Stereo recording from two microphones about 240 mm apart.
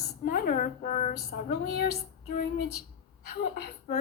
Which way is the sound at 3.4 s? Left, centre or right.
Left.